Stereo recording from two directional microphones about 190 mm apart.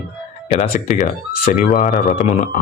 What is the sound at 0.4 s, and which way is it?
Speech, 35° left (ahead or behind).